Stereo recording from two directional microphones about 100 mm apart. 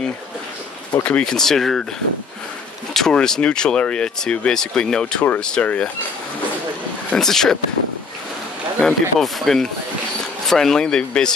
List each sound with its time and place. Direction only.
1.0 s speech: 10° left (ahead or behind)
2.9 s speech: 5° left (ahead or behind)
7.1 s speech: 5° left (ahead or behind)
8.7 s speech: 5° left (ahead or behind)